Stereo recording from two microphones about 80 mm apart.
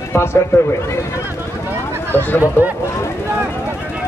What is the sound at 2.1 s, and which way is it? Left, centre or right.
Speech, left.